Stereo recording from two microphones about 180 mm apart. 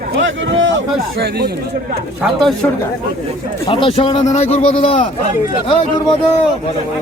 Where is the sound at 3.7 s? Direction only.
30° left (ahead or behind).